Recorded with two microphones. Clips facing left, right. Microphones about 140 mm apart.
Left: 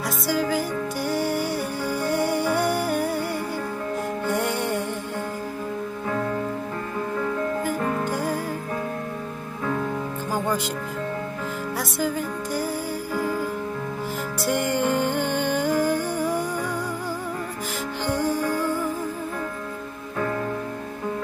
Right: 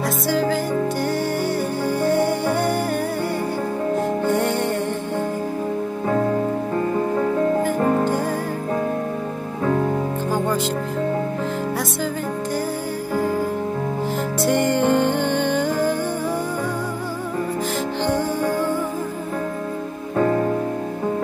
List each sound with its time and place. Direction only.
1.0 s music: 10° left (ahead or behind)
4.4 s music: 10° left (ahead or behind)
6.0 s music: 40° right (ahead or behind)
14.8 s music: 65° right (ahead or behind)
15.0 s music: 10° left (ahead or behind)
20.2 s music: 40° right (ahead or behind)